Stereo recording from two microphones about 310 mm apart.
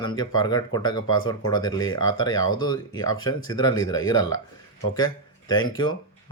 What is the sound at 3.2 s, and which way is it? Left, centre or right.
Speech, left.